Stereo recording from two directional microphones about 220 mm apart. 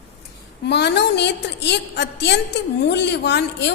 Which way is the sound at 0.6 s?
50° left (ahead or behind).